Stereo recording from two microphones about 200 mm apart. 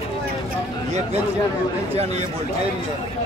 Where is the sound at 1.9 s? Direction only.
30° right (ahead or behind).